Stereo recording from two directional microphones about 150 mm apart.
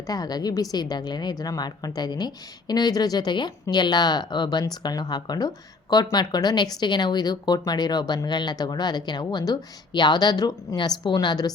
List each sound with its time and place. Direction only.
0.1 s speech: 25° left (ahead or behind)